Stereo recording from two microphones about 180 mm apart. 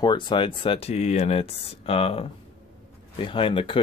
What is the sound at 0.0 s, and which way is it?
Speech, 25° left (ahead or behind).